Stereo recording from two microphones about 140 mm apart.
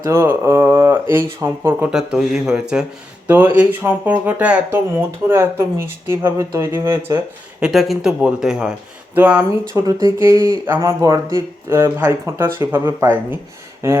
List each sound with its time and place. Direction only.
0.0 s speech: 15° right (ahead or behind)
1.9 s speech: 5° right (ahead or behind); by 7.2 s 20° right (ahead or behind)
7.6 s speech: centre (ahead or behind)
9.6 s speech: 25° right (ahead or behind)